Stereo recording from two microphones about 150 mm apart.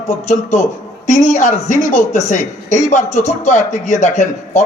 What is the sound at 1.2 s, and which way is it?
Speech, 50° left (ahead or behind).